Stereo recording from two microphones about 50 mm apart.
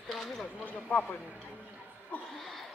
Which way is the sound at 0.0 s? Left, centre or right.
Centre.